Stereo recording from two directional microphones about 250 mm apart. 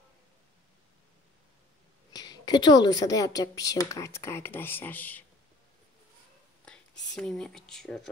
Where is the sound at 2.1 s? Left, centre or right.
Centre.